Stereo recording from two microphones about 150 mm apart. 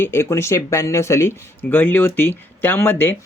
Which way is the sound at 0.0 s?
15° left (ahead or behind).